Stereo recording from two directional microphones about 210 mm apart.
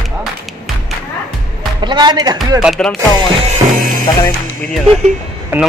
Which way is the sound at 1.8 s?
20° right (ahead or behind).